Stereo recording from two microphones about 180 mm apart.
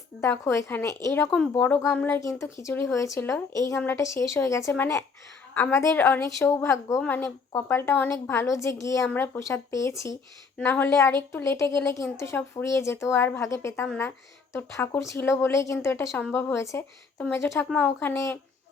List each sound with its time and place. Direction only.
0.2 s speech: 15° left (ahead or behind)